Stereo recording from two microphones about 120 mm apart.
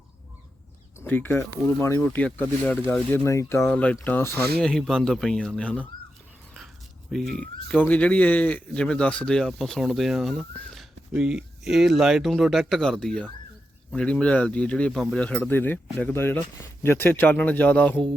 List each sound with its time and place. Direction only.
0.9 s speech: 15° left (ahead or behind)
4.6 s speech: 5° left (ahead or behind)
7.1 s speech: 5° left (ahead or behind)